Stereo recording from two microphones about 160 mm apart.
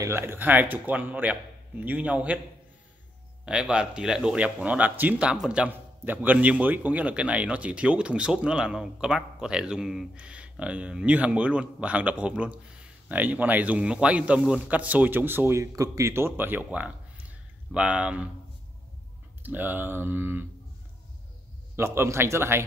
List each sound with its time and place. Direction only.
0.0 s speech: 15° right (ahead or behind)
3.4 s speech: 5° right (ahead or behind)
19.4 s speech: 10° right (ahead or behind)
21.7 s speech: 15° right (ahead or behind)